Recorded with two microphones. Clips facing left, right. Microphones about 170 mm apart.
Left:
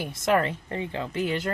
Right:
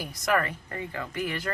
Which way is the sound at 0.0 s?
25° left (ahead or behind).